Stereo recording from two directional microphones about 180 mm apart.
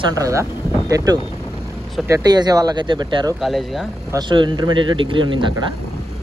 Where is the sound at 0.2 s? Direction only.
15° right (ahead or behind).